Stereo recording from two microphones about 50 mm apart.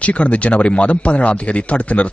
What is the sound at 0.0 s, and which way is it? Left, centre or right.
A man's voice, left.